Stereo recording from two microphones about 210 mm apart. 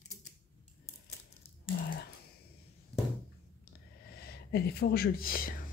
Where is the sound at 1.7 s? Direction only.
50° left (ahead or behind).